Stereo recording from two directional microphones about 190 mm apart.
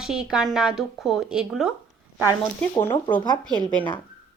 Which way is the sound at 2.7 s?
10° left (ahead or behind).